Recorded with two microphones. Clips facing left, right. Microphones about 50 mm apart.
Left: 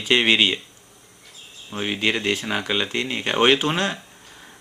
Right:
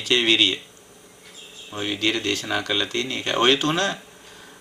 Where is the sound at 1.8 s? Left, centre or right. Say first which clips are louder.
Left 1 dB; centre.